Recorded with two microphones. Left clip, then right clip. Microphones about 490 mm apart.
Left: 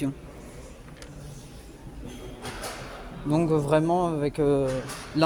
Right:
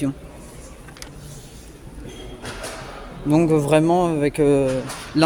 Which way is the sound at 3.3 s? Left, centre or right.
Left.